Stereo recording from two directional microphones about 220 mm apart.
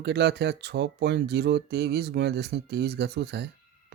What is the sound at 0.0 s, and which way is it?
Speech, 50° right (ahead or behind).